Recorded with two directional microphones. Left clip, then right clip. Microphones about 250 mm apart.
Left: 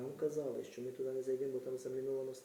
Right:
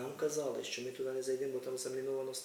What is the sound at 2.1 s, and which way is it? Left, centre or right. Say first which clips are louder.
Speech: right 1 dB; centre.